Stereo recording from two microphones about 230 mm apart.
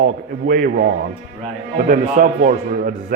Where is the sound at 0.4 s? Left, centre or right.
Right.